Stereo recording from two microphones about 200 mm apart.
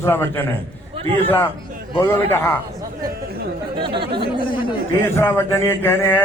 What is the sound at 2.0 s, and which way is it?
Speech, 10° left (ahead or behind).